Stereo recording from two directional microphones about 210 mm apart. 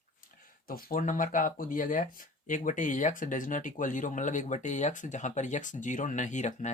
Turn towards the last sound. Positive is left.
turn(degrees=35)  # may be behind; listen again after turning